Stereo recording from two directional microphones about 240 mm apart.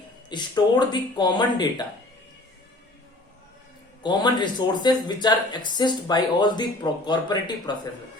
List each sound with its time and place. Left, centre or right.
0.3 s speech: centre
4.0 s speech: centre